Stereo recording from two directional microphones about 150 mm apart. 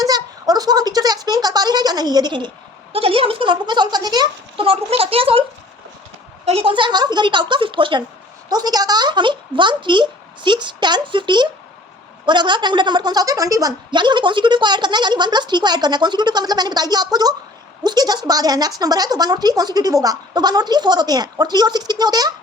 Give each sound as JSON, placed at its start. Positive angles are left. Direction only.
{"t": 0.0, "sound": "a woman's voice", "side_deg": -25}